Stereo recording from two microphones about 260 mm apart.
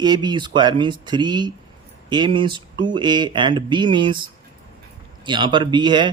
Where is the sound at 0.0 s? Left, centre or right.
Centre.